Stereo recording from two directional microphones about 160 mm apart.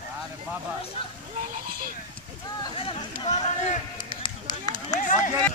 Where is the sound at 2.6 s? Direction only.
35° left (ahead or behind).